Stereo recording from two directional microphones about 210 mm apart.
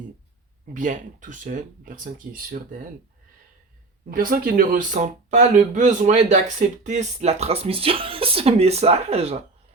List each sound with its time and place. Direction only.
0.7 s speech: 35° right (ahead or behind)
4.1 s speech: 40° right (ahead or behind)